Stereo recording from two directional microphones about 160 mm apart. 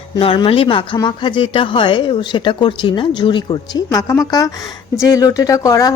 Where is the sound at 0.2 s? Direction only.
35° left (ahead or behind).